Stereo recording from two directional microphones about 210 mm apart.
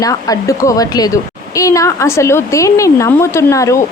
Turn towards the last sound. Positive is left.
turn(degrees=15)  # may be behind; listen again after turning